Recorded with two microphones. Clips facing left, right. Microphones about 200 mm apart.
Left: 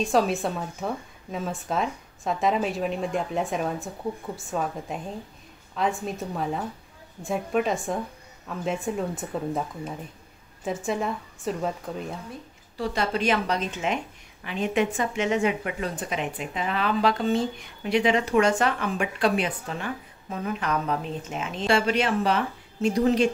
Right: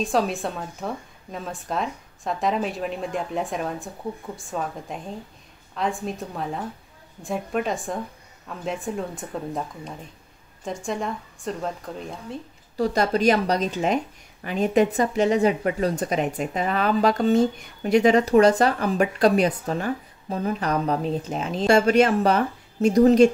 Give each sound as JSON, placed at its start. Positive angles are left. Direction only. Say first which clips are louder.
{"t": 0.0, "sound": "a woman's voice", "louder": "left 1 dB", "side_deg": 0}
{"t": 12.7, "sound": "a woman's voice", "louder": "right 5 dB", "side_deg": -40}